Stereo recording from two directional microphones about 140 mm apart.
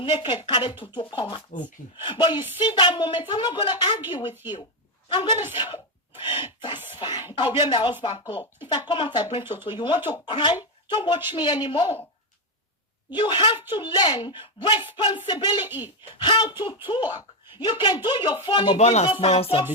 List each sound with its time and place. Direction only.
0.0 s speech: 35° left (ahead or behind)
5.0 s a woman's voice: 35° left (ahead or behind)
5.5 s a sound: 35° left (ahead or behind)
7.0 s speech: 30° left (ahead or behind)
13.1 s speech: 35° left (ahead or behind)
18.8 s speech: 50° left (ahead or behind)